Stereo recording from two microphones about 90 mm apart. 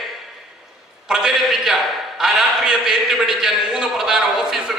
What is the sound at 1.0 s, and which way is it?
A man's voice, 5° right (ahead or behind).